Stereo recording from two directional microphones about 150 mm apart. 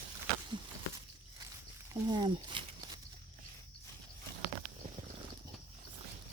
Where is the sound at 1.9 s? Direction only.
25° right (ahead or behind).